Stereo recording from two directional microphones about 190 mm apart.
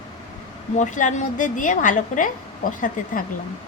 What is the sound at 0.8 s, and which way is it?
A woman's voice, 40° left (ahead or behind).